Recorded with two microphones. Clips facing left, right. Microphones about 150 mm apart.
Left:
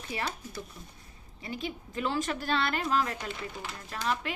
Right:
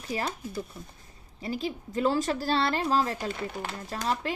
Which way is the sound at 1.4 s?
30° right (ahead or behind).